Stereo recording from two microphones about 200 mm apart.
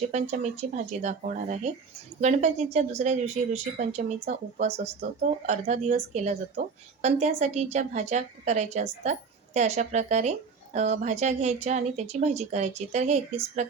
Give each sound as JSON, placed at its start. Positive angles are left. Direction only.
{"t": 0.1, "sound": "a woman's voice", "side_deg": -35}